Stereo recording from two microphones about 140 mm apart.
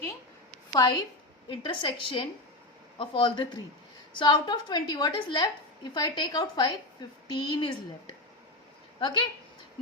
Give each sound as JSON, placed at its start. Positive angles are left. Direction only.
{"t": 0.7, "sound": "a woman's voice", "side_deg": 30}
{"t": 9.0, "sound": "a woman's voice", "side_deg": 35}